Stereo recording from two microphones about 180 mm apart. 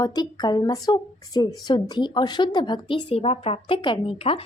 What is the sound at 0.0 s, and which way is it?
A woman's voice, 20° left (ahead or behind).